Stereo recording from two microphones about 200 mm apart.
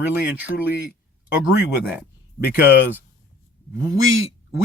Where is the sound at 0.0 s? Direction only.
10° right (ahead or behind).